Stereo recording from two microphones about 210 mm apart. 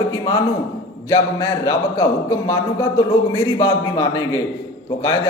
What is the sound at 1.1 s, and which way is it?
Speech, 15° left (ahead or behind).